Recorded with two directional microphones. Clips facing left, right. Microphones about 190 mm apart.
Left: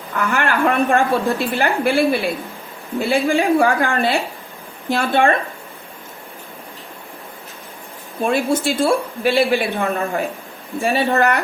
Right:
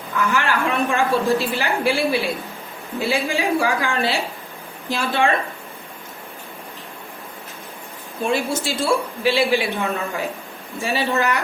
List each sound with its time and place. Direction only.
0.3 s a woman's voice: 55° left (ahead or behind)
8.2 s a woman's voice: 55° left (ahead or behind)